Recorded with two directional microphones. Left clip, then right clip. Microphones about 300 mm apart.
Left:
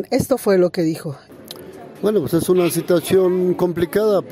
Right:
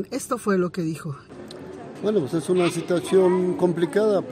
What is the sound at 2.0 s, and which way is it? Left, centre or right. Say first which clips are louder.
Speech: left 6 dB; left.